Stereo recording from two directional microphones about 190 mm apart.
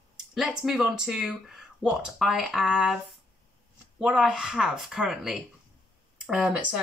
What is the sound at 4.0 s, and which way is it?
Speech, 5° right (ahead or behind).